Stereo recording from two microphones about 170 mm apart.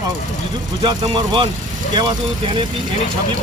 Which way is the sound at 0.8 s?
25° right (ahead or behind).